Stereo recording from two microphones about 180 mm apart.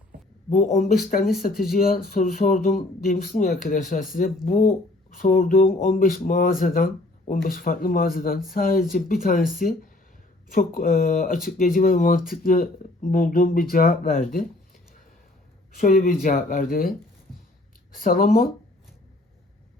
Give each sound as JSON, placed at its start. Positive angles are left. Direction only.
{"t": 0.5, "sound": "speech", "side_deg": 45}
{"t": 15.8, "sound": "speech", "side_deg": 45}
{"t": 17.9, "sound": "speech", "side_deg": 50}